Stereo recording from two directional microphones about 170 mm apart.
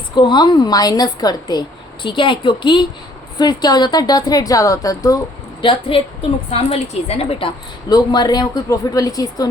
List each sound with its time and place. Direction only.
0.2 s a woman's voice: 25° left (ahead or behind)